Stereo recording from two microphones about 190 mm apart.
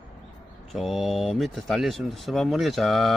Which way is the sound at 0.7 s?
Centre (ahead or behind).